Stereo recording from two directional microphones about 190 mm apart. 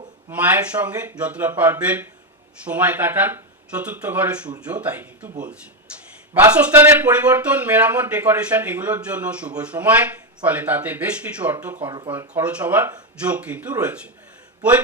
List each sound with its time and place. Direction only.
0.3 s speech: 10° right (ahead or behind)
6.3 s speech: 10° right (ahead or behind)
11.9 s speech: 20° right (ahead or behind)
12.4 s speech: 5° right (ahead or behind)